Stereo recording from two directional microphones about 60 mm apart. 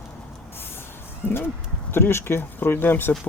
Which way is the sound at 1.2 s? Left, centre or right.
Left.